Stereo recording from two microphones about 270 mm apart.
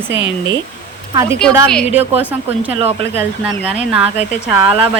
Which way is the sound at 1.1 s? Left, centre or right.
Centre.